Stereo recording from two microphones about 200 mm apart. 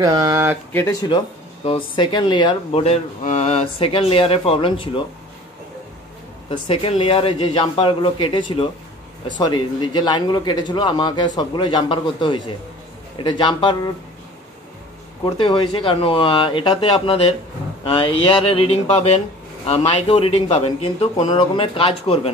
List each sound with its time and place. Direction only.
0.0 s speech: 20° right (ahead or behind)
0.7 s speech: 20° left (ahead or behind)
6.5 s speech: 25° left (ahead or behind)
15.3 s speech: 25° left (ahead or behind)